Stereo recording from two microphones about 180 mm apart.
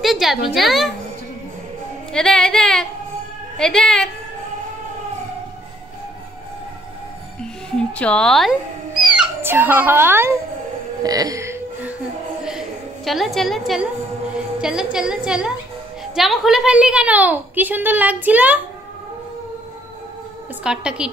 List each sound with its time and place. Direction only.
0.0 s a sound: centre (ahead or behind)
0.6 s a woman's voice: centre (ahead or behind)
2.1 s a woman's voice: 5° left (ahead or behind)
7.7 s speech: 5° left (ahead or behind); by 10.3 s 10° right (ahead or behind)
11.0 s music: 20° right (ahead or behind)
12.4 s a sound: centre (ahead or behind)
14.3 s a woman's voice: 5° right (ahead or behind)
20.6 s a woman's voice: 5° right (ahead or behind)